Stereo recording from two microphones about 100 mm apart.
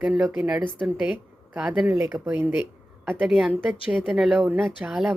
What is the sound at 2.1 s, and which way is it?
Speech, 25° right (ahead or behind).